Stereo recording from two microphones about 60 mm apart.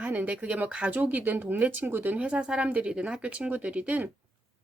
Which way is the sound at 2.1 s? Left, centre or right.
Centre.